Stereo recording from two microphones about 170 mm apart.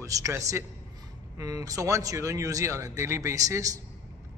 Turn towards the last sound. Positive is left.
turn(degrees=-20)  # may be behind; listen again after turning